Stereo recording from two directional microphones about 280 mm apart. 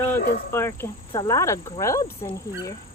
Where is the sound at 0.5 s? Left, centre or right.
Centre.